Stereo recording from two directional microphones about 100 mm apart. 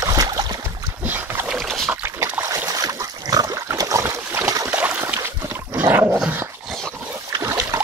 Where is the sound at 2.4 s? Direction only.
30° right (ahead or behind).